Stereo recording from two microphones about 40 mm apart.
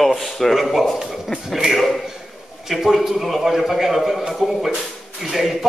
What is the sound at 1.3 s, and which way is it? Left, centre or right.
Speech, left.